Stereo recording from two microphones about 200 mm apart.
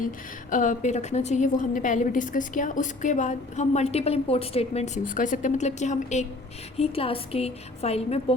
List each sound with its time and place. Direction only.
0.5 s a woman's voice: 40° left (ahead or behind)